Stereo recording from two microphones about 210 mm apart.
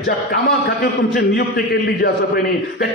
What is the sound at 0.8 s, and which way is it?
A man's voice, 50° left (ahead or behind).